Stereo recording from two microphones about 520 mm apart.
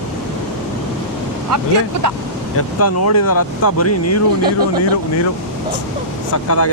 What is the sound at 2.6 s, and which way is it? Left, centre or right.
Speech, left.